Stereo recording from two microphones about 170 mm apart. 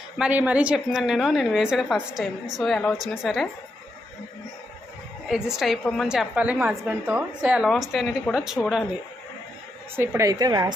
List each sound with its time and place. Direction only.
0.2 s a woman's voice: 10° right (ahead or behind)
5.5 s a woman's voice: centre (ahead or behind)
9.9 s a woman's voice: 15° right (ahead or behind)